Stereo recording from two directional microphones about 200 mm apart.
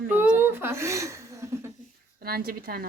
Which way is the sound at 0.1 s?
10° right (ahead or behind).